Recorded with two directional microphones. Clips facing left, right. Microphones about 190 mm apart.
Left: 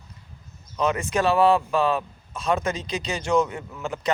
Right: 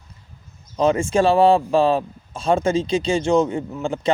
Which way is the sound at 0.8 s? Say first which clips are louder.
Right 6 dB; 30° right (ahead or behind).